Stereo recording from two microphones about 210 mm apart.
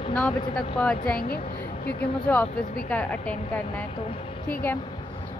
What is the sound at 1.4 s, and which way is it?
Speech, 30° left (ahead or behind).